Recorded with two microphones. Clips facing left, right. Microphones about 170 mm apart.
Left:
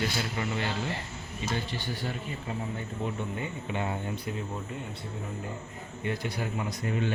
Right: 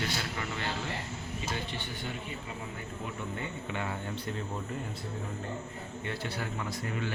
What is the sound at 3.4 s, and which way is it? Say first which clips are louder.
Speech: left 3 dB; 20° left (ahead or behind).